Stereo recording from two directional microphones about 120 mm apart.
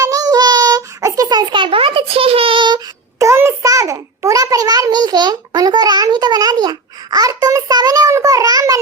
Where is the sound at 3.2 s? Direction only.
20° right (ahead or behind).